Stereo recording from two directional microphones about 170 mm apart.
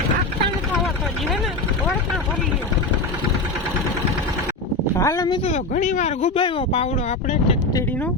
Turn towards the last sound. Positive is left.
turn(degrees=35)  # may be behind; listen again after turning